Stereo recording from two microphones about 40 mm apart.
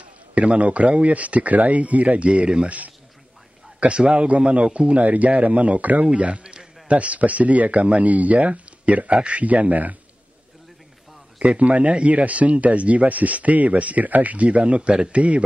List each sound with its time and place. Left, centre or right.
0.3 s a man's voice: right
3.8 s a man's voice: right
11.3 s a man's voice: right
11.6 s a man's voice: right